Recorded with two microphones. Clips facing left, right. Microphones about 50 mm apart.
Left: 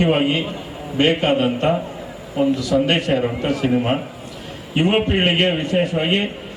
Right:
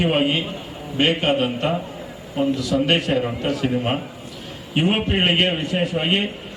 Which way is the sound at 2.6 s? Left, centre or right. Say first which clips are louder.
Left 2 dB; left.